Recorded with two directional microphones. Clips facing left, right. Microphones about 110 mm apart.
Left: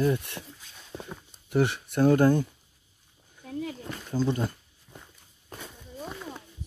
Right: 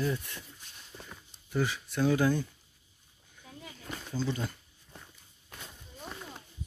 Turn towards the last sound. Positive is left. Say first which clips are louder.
# left 6 dB
turn(degrees=40)  # may be behind; listen again after turning